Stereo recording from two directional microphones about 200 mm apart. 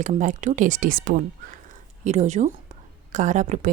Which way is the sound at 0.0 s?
40° right (ahead or behind).